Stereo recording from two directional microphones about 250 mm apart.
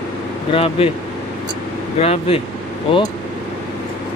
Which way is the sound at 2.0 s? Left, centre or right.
Left.